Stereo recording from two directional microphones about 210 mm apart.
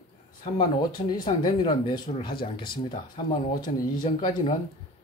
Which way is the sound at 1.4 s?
20° left (ahead or behind).